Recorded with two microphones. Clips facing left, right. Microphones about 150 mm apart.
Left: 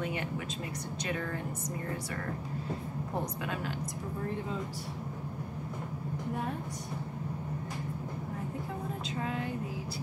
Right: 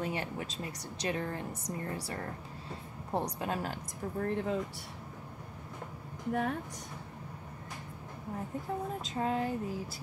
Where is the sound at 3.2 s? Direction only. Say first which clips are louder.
Right 3 dB; 35° right (ahead or behind).